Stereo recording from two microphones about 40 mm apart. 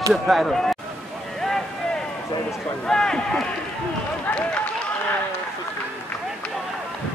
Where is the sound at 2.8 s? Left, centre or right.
Centre.